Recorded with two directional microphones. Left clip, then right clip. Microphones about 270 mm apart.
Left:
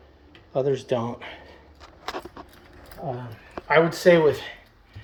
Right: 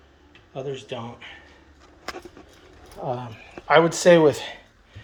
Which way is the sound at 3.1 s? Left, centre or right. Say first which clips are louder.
Right 4 dB; centre.